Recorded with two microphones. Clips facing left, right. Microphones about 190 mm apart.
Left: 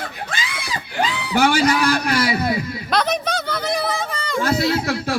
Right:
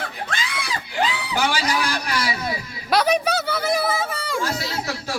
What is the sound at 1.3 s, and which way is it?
Speech, 55° left (ahead or behind).